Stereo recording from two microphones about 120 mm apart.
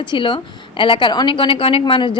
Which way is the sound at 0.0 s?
40° left (ahead or behind).